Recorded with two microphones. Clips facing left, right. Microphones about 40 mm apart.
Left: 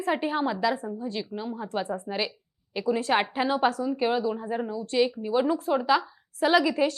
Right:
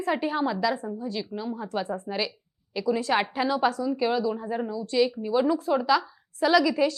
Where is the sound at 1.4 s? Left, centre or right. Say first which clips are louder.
Right 1 dB; left.